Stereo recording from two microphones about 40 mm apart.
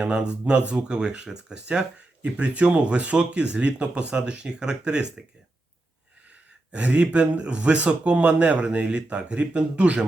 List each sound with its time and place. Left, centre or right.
0.0 s speech: right
2.2 s speech: right
6.7 s speech: right